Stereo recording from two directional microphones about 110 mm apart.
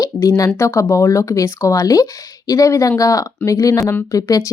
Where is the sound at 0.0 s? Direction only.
30° left (ahead or behind).